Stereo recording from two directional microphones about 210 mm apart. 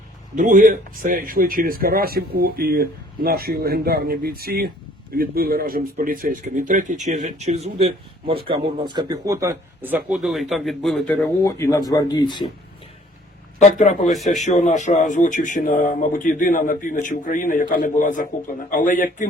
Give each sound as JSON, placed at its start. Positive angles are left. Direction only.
{"t": 0.3, "sound": "speech", "side_deg": -40}
{"t": 13.6, "sound": "speech", "side_deg": 35}
{"t": 14.0, "sound": "speech", "side_deg": 0}
{"t": 14.3, "sound": "speech", "side_deg": 35}